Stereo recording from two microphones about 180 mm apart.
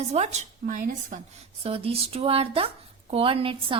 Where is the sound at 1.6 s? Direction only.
35° right (ahead or behind).